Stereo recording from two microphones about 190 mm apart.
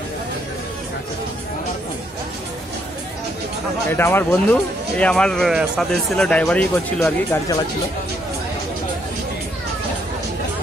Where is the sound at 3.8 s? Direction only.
10° left (ahead or behind).